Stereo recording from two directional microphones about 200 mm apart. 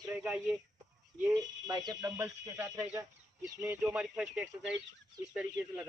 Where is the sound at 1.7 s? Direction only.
20° right (ahead or behind).